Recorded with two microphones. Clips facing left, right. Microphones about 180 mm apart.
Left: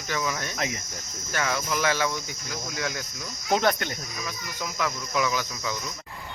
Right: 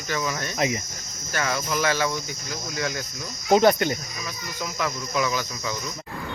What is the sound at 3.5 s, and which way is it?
Speech, 5° right (ahead or behind).